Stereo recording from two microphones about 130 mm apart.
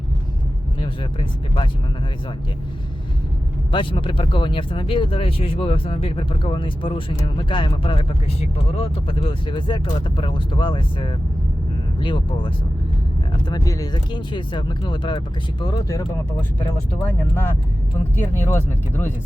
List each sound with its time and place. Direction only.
0.8 s speech: 40° left (ahead or behind)
3.7 s speech: 40° left (ahead or behind)
16.4 s speech: 15° left (ahead or behind)